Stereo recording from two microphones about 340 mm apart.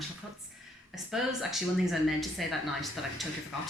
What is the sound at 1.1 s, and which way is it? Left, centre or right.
Speech, centre.